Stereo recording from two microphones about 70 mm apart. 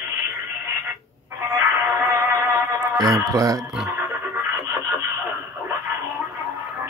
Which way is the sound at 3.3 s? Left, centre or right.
Right.